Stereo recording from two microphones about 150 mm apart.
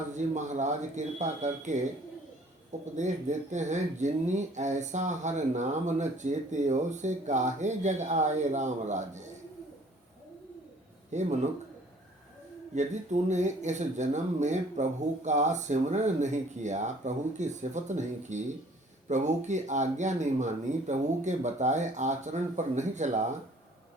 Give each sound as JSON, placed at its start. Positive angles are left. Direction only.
{"t": 0.3, "sound": "speech", "side_deg": -50}
{"t": 2.9, "sound": "speech", "side_deg": -50}
{"t": 11.1, "sound": "a man's voice", "side_deg": -50}
{"t": 12.7, "sound": "speech", "side_deg": -50}